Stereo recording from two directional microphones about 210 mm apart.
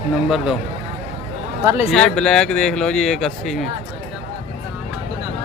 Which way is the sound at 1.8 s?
Centre (ahead or behind).